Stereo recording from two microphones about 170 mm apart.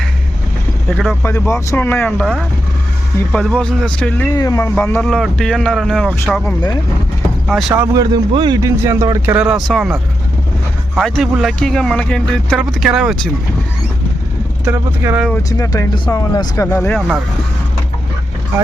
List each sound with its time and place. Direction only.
0.9 s speech: centre (ahead or behind)
1.2 s speech: 15° left (ahead or behind)
2.0 s speech: centre (ahead or behind)
4.4 s speech: 20° left (ahead or behind)
4.8 s speech: 10° left (ahead or behind)
7.7 s speech: 15° right (ahead or behind)
8.1 s speech: 30° right (ahead or behind)
9.3 s speech: 5° right (ahead or behind)
10.9 s speech: centre (ahead or behind)
14.6 s speech: 10° right (ahead or behind)
15.4 s speech: 20° left (ahead or behind)